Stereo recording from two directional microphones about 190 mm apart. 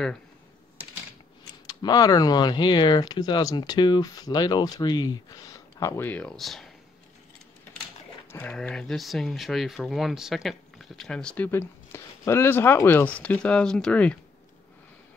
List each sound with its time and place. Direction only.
1.7 s speech: 20° left (ahead or behind); by 6.7 s centre (ahead or behind)
8.3 s speech: 10° left (ahead or behind)